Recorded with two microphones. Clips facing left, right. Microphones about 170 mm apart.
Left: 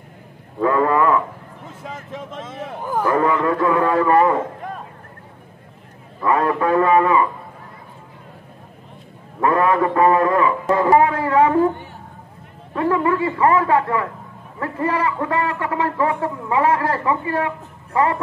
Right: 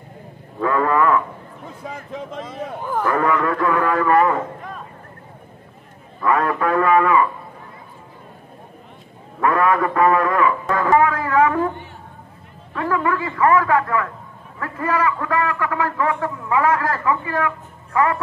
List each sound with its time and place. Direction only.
0.6 s a man's voice: 25° left (ahead or behind)
2.4 s a man's voice: 5° left (ahead or behind); by 4.4 s 25° left (ahead or behind)
6.2 s a man's voice: 25° left (ahead or behind)
9.4 s a man's voice: 25° left (ahead or behind)
12.7 s a man's voice: 30° left (ahead or behind)